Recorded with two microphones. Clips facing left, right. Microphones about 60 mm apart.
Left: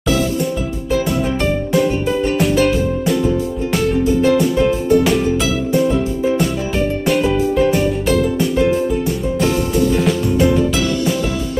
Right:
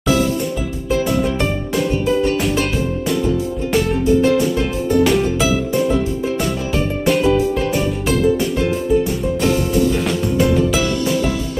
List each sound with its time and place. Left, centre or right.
2.3 s music: centre
3.7 s music: centre
7.1 s music: centre